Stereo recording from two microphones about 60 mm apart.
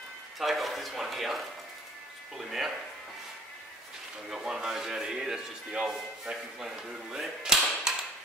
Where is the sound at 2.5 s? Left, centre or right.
Centre.